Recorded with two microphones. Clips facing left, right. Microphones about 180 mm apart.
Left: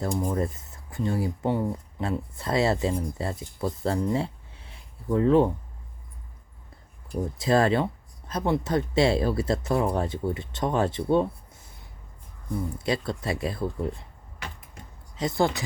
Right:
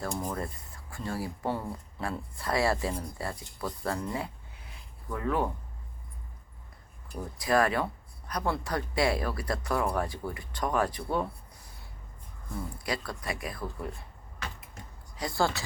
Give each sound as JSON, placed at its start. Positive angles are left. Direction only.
{"t": 0.3, "sound": "speech", "side_deg": 20}
{"t": 7.2, "sound": "speech", "side_deg": 25}
{"t": 12.7, "sound": "speech", "side_deg": 25}
{"t": 15.1, "sound": "speech", "side_deg": 20}